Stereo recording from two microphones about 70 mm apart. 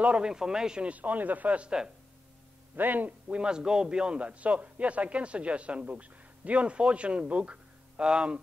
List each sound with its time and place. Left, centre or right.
0.0 s a man's voice: centre
2.7 s a man's voice: right